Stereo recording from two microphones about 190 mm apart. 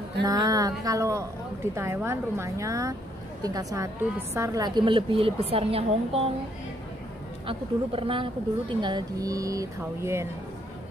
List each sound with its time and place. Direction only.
0.2 s a woman's voice: 20° right (ahead or behind)
7.4 s a woman's voice: 30° right (ahead or behind)